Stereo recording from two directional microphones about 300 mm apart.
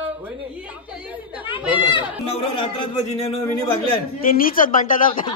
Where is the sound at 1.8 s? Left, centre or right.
Centre.